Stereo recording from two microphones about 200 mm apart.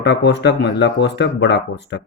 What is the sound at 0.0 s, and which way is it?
Speech, 60° left (ahead or behind).